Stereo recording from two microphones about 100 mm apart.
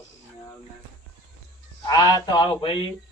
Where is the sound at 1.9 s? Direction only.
40° left (ahead or behind).